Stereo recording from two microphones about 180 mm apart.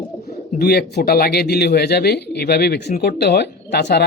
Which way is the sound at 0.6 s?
60° left (ahead or behind).